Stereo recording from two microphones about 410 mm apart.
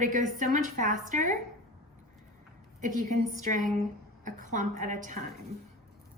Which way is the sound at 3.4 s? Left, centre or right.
Centre.